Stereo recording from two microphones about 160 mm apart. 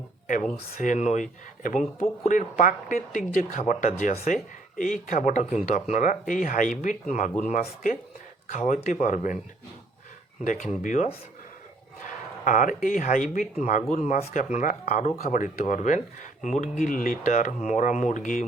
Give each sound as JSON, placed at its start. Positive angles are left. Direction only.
{"t": 0.8, "sound": "speech", "side_deg": 50}
{"t": 4.1, "sound": "speech", "side_deg": 40}
{"t": 4.8, "sound": "speech", "side_deg": 55}
{"t": 10.4, "sound": "speech", "side_deg": 55}